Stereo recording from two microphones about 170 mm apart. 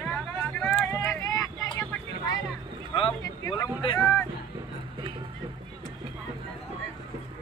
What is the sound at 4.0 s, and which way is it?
Music, 5° left (ahead or behind).